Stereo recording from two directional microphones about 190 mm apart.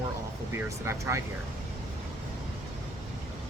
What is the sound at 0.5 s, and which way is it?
Speech, 15° right (ahead or behind).